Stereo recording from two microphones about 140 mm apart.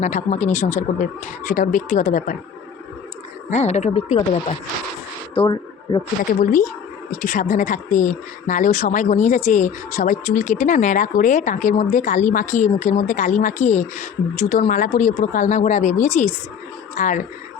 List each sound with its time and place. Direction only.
0.0 s speech: 55° left (ahead or behind)
3.5 s speech: 50° left (ahead or behind)
5.3 s speech: 35° left (ahead or behind)
6.4 s speech: 75° left (ahead or behind)
7.1 s speech: 65° left (ahead or behind)
14.7 s speech: 65° left (ahead or behind)